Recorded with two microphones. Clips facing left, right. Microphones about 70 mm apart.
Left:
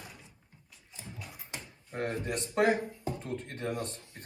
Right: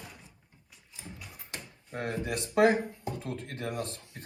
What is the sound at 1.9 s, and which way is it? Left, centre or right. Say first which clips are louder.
Speech: even; centre.